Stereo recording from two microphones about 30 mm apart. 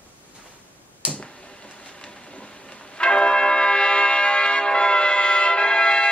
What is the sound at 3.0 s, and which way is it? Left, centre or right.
Church bell, left.